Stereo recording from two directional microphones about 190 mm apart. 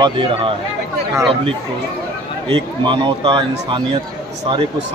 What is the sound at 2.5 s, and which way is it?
Speech, 25° right (ahead or behind).